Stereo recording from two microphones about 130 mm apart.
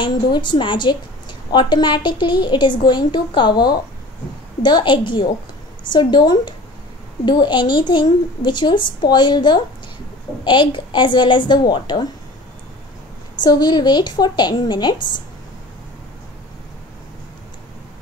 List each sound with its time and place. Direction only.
0.0 s a woman's voice: 35° left (ahead or behind)
13.4 s a woman's voice: 35° left (ahead or behind)